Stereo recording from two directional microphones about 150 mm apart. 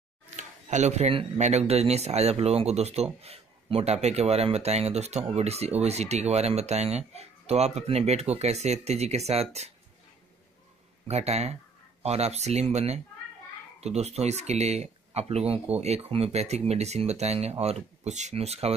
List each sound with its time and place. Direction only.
0.4 s speech: 50° right (ahead or behind)
11.1 s speech: 45° right (ahead or behind)